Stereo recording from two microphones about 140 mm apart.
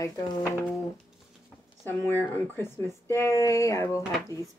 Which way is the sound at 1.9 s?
15° left (ahead or behind).